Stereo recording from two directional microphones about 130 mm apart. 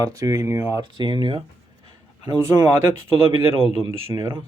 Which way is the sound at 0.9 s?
35° right (ahead or behind).